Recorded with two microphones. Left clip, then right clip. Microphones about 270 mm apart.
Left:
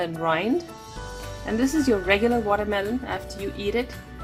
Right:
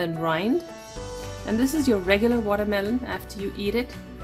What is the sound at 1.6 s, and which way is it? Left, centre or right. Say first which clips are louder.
Speech: left 1 dB; right.